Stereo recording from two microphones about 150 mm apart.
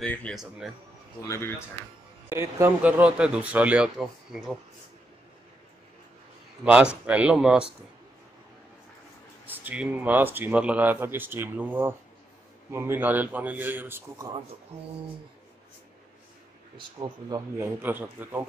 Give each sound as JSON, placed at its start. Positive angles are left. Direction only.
{"t": 0.0, "sound": "speech", "side_deg": 5}
{"t": 0.4, "sound": "speech", "side_deg": -5}
{"t": 1.2, "sound": "speech", "side_deg": 20}
{"t": 2.2, "sound": "speech", "side_deg": -15}
{"t": 6.6, "sound": "speech", "side_deg": -5}
{"t": 9.5, "sound": "speech", "side_deg": -10}
{"t": 16.7, "sound": "speech", "side_deg": -30}
{"t": 17.6, "sound": "speech", "side_deg": -10}